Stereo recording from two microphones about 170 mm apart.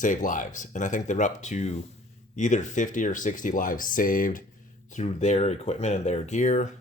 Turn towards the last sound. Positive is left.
turn(degrees=45)  # may be behind; listen again after turning